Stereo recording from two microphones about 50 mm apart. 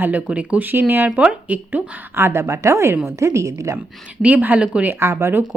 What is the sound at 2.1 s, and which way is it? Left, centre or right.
A woman's voice, right.